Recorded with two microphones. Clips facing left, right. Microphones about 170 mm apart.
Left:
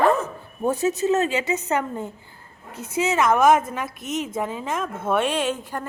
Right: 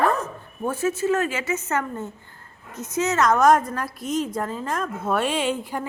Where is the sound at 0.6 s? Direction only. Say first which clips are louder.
Left 2 dB; 20° left (ahead or behind).